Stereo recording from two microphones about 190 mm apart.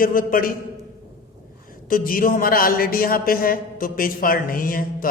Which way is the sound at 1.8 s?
45° left (ahead or behind).